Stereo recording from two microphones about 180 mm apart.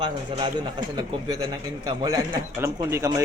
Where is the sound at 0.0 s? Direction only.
25° right (ahead or behind).